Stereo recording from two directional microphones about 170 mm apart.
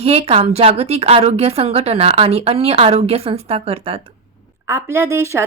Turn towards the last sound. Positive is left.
turn(degrees=-15)  # may be behind; listen again after turning